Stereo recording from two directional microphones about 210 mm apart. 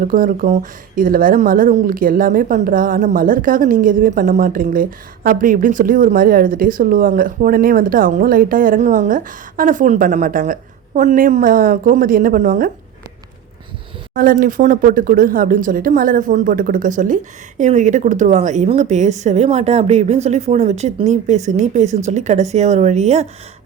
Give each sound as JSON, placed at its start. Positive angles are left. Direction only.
{"t": 0.0, "sound": "speech", "side_deg": -40}
{"t": 14.1, "sound": "speech", "side_deg": -40}